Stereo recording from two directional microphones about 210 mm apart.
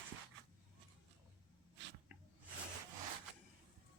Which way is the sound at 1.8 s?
60° right (ahead or behind).